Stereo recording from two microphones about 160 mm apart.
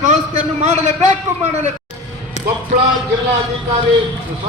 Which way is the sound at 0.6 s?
45° right (ahead or behind).